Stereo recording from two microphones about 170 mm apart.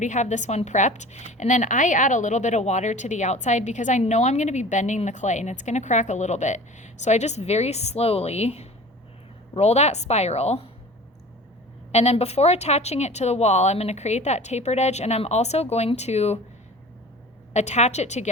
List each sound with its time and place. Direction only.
0.0 s a woman's voice: 45° left (ahead or behind)
11.9 s speech: 40° left (ahead or behind)
17.5 s a woman's voice: 40° left (ahead or behind)